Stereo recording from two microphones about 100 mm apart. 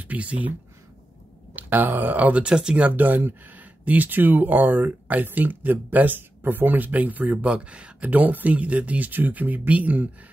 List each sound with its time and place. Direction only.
0.1 s speech: 15° right (ahead or behind)
1.5 s speech: 20° right (ahead or behind)